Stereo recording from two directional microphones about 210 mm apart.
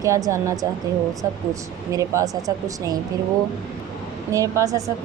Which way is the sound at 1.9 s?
15° right (ahead or behind).